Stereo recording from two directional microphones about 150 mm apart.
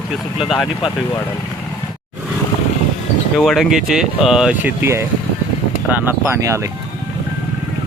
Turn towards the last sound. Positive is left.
turn(degrees=-20)  # may be behind; listen again after turning